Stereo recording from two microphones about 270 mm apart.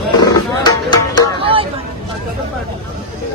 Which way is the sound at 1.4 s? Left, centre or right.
Centre.